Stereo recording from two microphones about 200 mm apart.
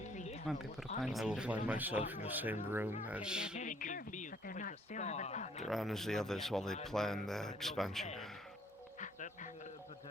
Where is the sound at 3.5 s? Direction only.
40° left (ahead or behind).